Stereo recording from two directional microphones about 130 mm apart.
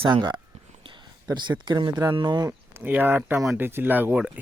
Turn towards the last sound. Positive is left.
turn(degrees=-10)  # may be behind; listen again after turning